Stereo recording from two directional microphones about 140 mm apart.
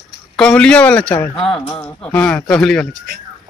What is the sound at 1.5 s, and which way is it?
Speech, 35° left (ahead or behind).